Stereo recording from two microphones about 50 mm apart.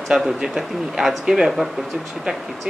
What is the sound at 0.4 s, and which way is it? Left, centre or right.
Speech, centre.